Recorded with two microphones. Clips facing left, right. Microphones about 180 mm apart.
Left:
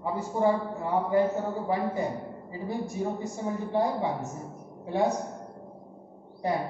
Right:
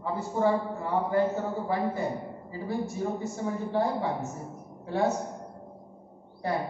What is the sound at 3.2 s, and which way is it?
A woman's voice, 15° left (ahead or behind).